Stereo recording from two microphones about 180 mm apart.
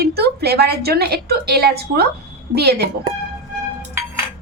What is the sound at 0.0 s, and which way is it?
A woman's voice, 60° right (ahead or behind).